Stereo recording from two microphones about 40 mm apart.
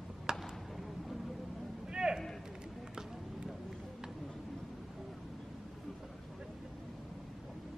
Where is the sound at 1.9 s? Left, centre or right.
Centre.